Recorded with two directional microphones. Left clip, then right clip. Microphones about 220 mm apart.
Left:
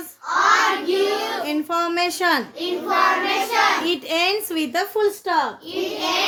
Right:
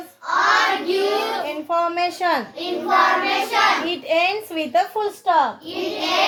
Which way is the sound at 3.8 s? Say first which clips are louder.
Right 1 dB; 55° left (ahead or behind).